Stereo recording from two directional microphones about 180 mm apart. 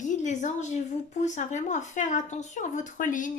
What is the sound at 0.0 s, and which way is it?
Speech, 45° left (ahead or behind).